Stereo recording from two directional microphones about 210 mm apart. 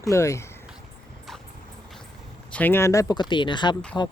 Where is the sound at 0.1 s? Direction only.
15° left (ahead or behind).